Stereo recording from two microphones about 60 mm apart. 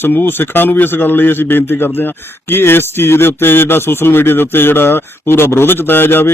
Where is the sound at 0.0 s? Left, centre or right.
Left.